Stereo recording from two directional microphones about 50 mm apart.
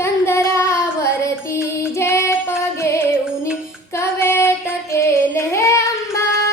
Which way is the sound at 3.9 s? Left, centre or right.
Left.